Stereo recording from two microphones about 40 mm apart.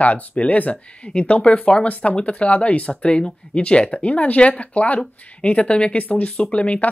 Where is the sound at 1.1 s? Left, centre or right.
Left.